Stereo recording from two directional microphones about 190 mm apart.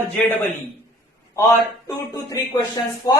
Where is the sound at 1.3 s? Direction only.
15° left (ahead or behind).